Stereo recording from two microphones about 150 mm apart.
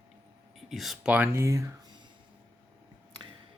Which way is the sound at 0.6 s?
Centre (ahead or behind).